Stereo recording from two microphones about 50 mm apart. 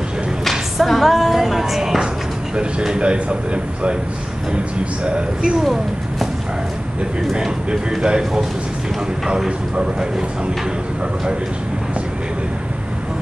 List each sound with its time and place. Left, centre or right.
0.5 s music: centre
2.5 s speech: centre
5.0 s speech: right
5.6 s speech: centre
7.3 s speech: centre
9.8 s speech: centre